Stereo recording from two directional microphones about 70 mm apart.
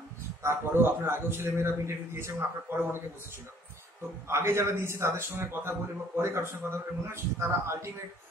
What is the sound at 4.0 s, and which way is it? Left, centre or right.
A man's voice, right.